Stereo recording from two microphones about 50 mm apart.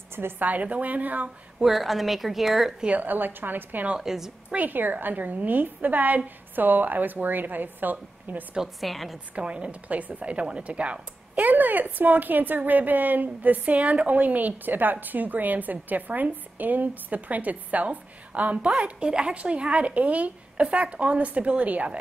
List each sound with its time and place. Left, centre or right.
0.4 s a woman's voice: right
1.6 s speech: centre
2.9 s a woman's voice: right
4.0 s a woman's voice: centre
4.6 s a woman's voice: right
8.8 s speech: centre
9.3 s a woman's voice: right